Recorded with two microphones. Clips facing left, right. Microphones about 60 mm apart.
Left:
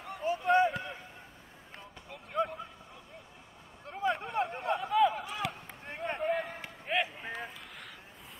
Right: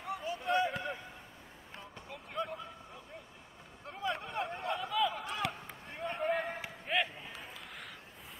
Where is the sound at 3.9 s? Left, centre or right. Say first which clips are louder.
Left 5 dB; centre.